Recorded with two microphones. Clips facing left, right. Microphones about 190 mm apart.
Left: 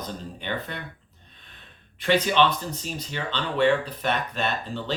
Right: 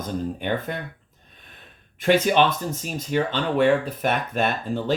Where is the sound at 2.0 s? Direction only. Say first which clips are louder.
Right 3 dB; 50° right (ahead or behind).